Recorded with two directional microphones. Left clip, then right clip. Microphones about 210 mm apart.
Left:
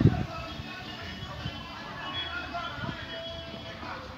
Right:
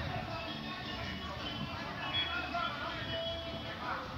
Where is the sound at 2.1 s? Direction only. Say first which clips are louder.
Even; 50° right (ahead or behind).